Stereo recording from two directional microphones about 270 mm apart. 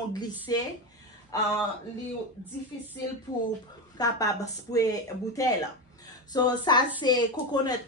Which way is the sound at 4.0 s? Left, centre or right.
Centre.